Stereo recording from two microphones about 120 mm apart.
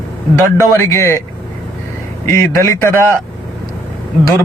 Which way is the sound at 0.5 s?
25° left (ahead or behind).